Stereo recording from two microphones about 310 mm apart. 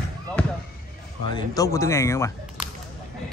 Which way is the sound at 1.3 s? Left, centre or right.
Centre.